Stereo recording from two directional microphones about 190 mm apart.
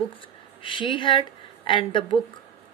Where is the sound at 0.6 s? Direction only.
25° left (ahead or behind).